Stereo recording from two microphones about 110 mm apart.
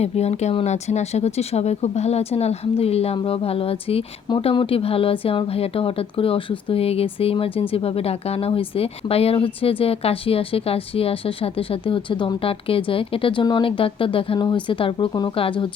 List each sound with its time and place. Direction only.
0.0 s speech: 75° left (ahead or behind); by 14.3 s 55° left (ahead or behind)
14.3 s speech: 45° left (ahead or behind)
15.4 s speech: 55° left (ahead or behind)